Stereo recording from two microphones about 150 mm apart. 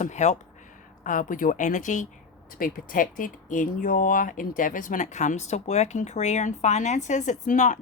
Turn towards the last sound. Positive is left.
turn(degrees=55)  # may be behind; listen again after turning